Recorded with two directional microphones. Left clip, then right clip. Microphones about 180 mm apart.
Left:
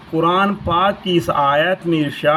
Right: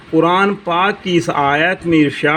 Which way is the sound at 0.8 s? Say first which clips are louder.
Even; 30° right (ahead or behind).